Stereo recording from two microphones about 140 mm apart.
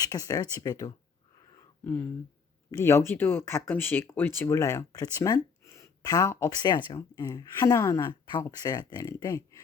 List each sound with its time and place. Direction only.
0.0 s speech: 25° left (ahead or behind)
1.8 s speech: 15° left (ahead or behind)